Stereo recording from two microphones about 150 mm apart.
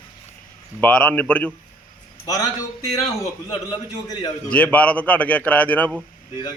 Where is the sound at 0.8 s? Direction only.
10° left (ahead or behind).